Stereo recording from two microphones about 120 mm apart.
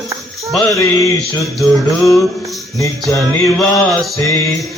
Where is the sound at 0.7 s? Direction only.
25° left (ahead or behind).